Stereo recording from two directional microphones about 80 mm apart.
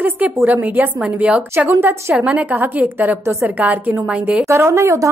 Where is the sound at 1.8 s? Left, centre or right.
Right.